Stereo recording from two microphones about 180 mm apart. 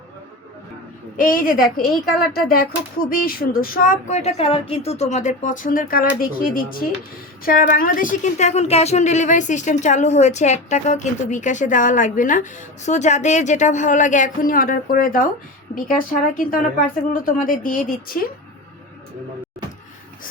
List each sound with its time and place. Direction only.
1.1 s a woman's voice: 50° left (ahead or behind)